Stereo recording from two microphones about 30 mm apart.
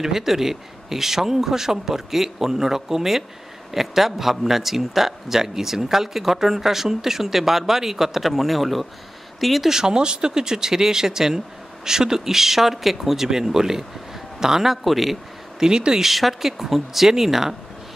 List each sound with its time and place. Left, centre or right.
0.0 s speech: centre
9.7 s speech: right
14.8 s speech: centre
15.6 s speech: right
16.0 s speech: centre